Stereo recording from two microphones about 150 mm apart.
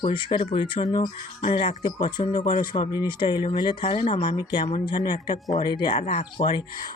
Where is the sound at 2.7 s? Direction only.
30° left (ahead or behind).